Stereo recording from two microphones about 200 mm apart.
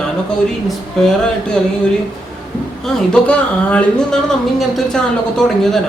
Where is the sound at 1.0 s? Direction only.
Centre (ahead or behind).